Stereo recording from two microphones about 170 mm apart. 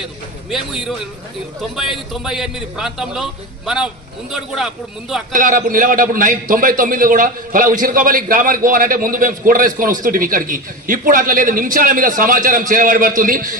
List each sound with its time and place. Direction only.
0.5 s a man's voice: centre (ahead or behind)
4.3 s a man's voice: centre (ahead or behind)
5.3 s a man's voice: 55° right (ahead or behind)